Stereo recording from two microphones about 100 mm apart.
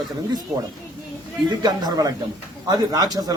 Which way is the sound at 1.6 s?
40° right (ahead or behind).